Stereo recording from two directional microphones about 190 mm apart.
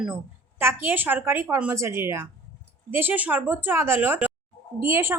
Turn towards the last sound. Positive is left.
turn(degrees=-15)  # may be behind; listen again after turning